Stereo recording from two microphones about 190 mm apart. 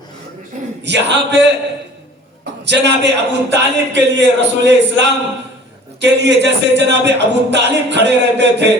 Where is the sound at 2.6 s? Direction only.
65° right (ahead or behind).